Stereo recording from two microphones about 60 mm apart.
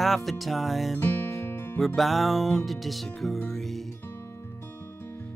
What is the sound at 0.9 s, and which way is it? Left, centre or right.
Music, left.